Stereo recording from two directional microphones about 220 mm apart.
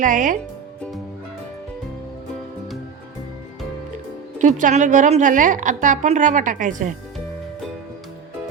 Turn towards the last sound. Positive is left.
turn(degrees=-35)  # may be behind; listen again after turning